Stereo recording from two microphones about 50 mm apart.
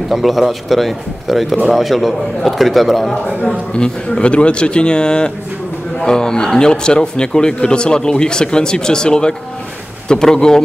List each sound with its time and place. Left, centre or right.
0.1 s speech: centre
3.4 s a man's voice: centre